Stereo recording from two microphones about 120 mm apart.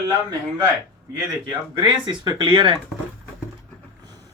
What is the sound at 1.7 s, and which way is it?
Speech, 40° right (ahead or behind).